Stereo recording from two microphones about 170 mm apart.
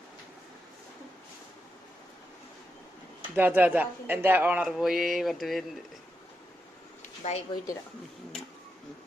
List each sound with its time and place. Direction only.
3.3 s speech: 10° right (ahead or behind)
7.2 s speech: 40° left (ahead or behind)